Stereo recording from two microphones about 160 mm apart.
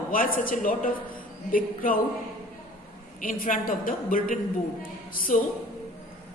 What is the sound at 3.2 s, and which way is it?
A man's voice, 55° left (ahead or behind).